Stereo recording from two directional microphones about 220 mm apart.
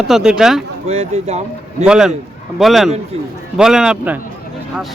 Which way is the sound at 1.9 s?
5° right (ahead or behind).